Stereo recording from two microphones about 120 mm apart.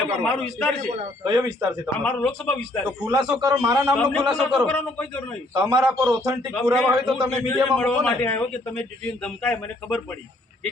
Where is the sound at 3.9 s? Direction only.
5° left (ahead or behind).